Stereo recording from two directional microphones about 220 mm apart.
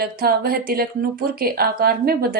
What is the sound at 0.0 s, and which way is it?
A woman's voice, 45° right (ahead or behind).